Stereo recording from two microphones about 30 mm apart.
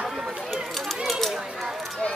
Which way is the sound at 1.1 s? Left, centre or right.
Centre.